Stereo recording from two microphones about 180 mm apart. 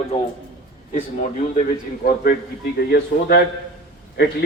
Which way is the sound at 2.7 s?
65° left (ahead or behind).